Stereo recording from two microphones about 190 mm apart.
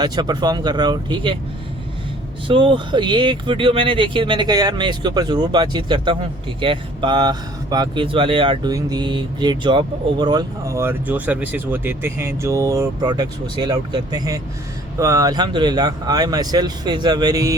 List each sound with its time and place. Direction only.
0.0 s speech: 20° right (ahead or behind)
2.5 s speech: 25° right (ahead or behind)